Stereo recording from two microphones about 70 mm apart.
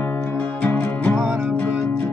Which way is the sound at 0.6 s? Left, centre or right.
Centre.